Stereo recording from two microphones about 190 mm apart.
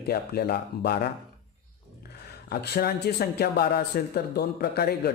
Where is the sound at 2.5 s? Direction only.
55° left (ahead or behind).